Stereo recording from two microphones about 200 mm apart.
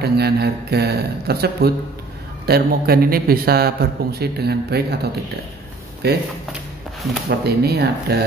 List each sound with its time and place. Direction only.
0.0 s a man's voice: 55° right (ahead or behind)
6.0 s a man's voice: 55° right (ahead or behind)
7.2 s a man's voice: 55° right (ahead or behind)